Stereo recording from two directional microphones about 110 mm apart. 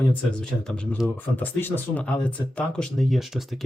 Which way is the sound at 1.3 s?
15° left (ahead or behind).